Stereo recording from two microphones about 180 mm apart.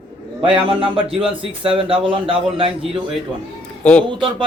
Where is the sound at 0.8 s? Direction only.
30° right (ahead or behind).